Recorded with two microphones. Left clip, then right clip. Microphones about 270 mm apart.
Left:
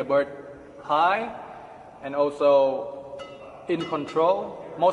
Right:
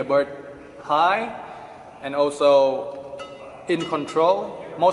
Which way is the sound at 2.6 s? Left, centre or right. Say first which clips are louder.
Right 3 dB; left.